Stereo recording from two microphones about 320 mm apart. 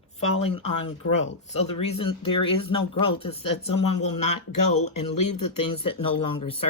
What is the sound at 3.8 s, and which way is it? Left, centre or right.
Speech, left.